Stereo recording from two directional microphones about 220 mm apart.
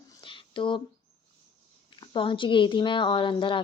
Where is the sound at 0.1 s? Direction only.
20° left (ahead or behind).